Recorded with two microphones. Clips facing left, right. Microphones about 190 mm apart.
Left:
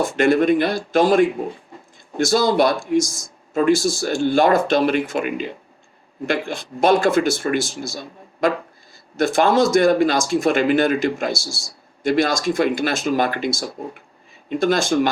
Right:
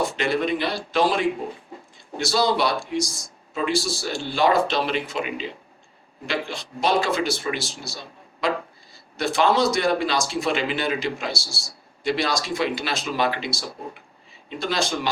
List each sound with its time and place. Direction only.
0.0 s speech: 50° left (ahead or behind)